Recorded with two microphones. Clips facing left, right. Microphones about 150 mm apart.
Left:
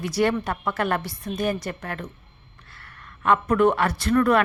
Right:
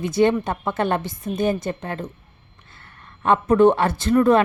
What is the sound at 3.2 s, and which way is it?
A woman's voice, 25° right (ahead or behind).